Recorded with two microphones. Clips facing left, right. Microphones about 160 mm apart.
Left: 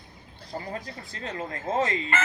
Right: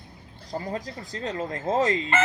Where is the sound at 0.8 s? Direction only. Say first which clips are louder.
Right 5 dB; 35° right (ahead or behind).